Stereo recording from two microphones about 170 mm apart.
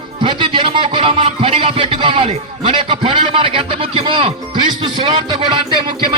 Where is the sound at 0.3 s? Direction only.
30° right (ahead or behind).